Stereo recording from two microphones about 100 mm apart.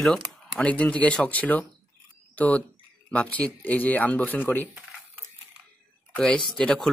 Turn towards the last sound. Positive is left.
turn(degrees=10)  # may be behind; listen again after turning